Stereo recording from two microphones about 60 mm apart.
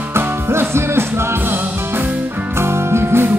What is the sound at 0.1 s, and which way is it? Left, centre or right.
Music, right.